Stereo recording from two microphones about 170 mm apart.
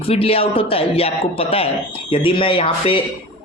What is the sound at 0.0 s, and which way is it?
A woman's voice, 35° left (ahead or behind).